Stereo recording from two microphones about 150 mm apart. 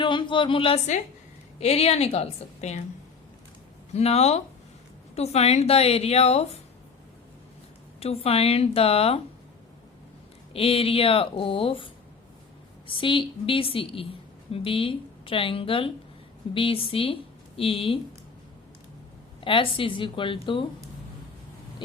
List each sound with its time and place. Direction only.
0.0 s a woman's voice: 35° left (ahead or behind); by 2.8 s 50° left (ahead or behind)
3.9 s a woman's voice: 45° left (ahead or behind)
7.9 s speech: 40° left (ahead or behind)
10.5 s speech: 40° left (ahead or behind)
12.9 s speech: 35° left (ahead or behind)
19.4 s speech: 35° left (ahead or behind)